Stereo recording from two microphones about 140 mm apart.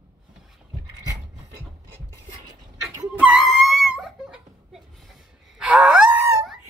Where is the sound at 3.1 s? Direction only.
5° right (ahead or behind).